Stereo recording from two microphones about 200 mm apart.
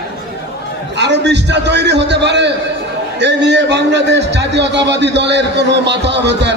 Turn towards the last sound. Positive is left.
turn(degrees=-60)  # may be behind; listen again after turning